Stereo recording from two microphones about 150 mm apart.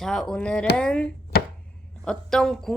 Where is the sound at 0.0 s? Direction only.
5° left (ahead or behind).